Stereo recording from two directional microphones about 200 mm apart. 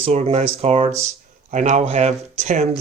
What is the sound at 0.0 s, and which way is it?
Speech, 35° right (ahead or behind).